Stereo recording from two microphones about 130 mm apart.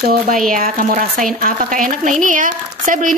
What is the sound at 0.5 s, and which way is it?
Speech, 90° right.